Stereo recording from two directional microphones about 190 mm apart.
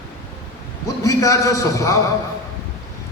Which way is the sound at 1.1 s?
15° left (ahead or behind).